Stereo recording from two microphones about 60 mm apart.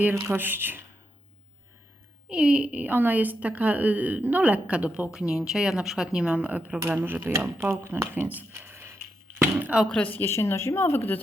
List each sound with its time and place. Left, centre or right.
0.0 s speech: right
2.3 s a woman's voice: centre
2.8 s a woman's voice: right
6.9 s speech: right
8.1 s speech: right
8.5 s a sound: right
10.0 s a woman's voice: left
10.2 s speech: left